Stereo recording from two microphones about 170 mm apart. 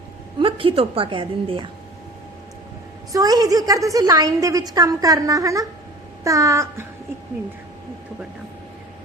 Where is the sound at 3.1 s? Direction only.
20° right (ahead or behind).